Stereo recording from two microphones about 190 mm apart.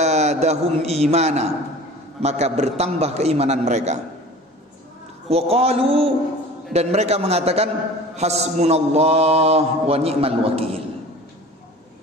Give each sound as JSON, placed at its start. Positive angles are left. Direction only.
{"t": 0.0, "sound": "a man's voice", "side_deg": -35}
{"t": 5.3, "sound": "a man's voice", "side_deg": -30}